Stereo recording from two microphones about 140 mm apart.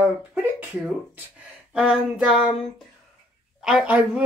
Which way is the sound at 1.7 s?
5° right (ahead or behind).